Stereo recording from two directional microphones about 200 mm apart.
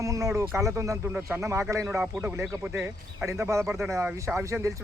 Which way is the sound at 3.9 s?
15° right (ahead or behind).